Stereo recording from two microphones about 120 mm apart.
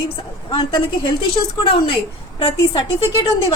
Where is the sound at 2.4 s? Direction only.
45° left (ahead or behind).